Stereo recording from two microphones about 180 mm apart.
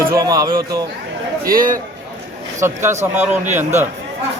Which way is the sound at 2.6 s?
15° right (ahead or behind).